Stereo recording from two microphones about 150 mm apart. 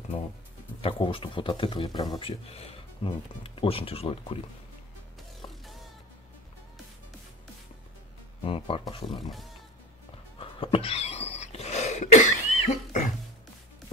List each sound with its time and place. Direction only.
0.7 s speech: 35° left (ahead or behind)
8.4 s speech: 40° left (ahead or behind)
9.2 s speech: centre (ahead or behind)
10.4 s cough: 35° left (ahead or behind)